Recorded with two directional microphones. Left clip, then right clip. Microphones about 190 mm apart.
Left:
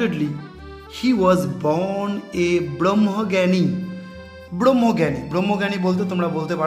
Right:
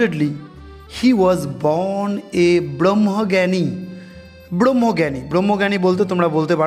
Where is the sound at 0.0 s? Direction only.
30° right (ahead or behind).